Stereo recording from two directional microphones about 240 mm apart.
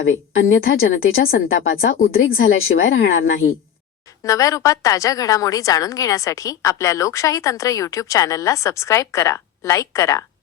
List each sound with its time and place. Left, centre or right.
0.0 s a woman's voice: left
2.0 s speech: left
2.4 s a woman's voice: left
4.2 s a woman's voice: centre